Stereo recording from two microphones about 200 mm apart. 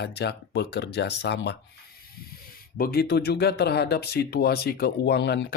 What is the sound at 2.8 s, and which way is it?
Speech, 50° left (ahead or behind).